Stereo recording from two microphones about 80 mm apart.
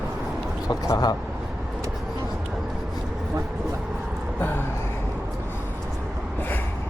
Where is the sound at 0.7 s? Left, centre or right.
Left.